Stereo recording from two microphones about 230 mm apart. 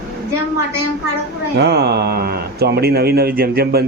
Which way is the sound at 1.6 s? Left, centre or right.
Right.